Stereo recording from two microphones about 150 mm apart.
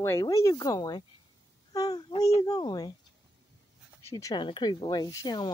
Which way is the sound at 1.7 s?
25° left (ahead or behind).